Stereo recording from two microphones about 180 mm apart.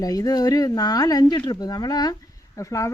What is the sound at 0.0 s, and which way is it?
A woman's voice, 20° left (ahead or behind).